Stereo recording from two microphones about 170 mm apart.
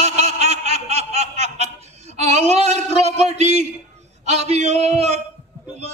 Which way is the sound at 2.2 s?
40° right (ahead or behind).